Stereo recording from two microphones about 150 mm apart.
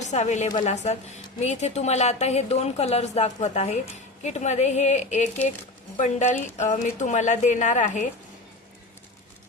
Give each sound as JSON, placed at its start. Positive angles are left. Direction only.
{"t": 0.0, "sound": "a woman's voice", "side_deg": 50}